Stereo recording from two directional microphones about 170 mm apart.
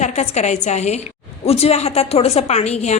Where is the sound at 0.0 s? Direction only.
40° left (ahead or behind).